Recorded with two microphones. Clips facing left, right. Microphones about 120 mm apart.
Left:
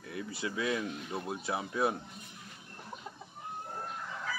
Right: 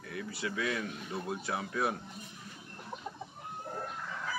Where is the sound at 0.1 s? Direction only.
25° left (ahead or behind).